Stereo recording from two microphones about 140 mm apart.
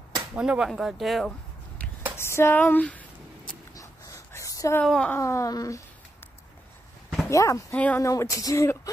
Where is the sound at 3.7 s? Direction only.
25° left (ahead or behind).